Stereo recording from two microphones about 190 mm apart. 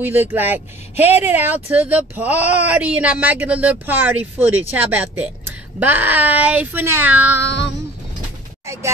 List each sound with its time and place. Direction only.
0.0 s speech: 10° right (ahead or behind)
7.4 s child singing: 65° left (ahead or behind)